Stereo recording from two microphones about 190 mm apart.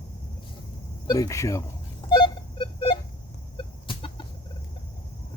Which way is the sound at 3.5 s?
25° left (ahead or behind).